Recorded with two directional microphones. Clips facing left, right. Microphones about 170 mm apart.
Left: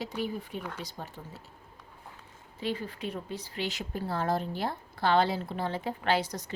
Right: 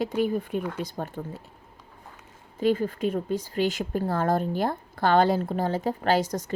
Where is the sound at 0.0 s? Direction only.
55° right (ahead or behind).